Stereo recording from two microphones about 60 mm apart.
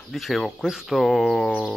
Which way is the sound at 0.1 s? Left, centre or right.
Centre.